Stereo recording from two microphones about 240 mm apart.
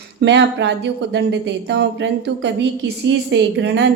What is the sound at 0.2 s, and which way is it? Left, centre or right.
A woman's voice, right.